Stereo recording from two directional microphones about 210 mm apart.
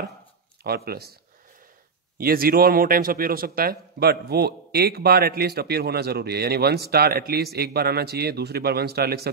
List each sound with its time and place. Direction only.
0.7 s speech: 50° right (ahead or behind)
2.1 s speech: 45° right (ahead or behind)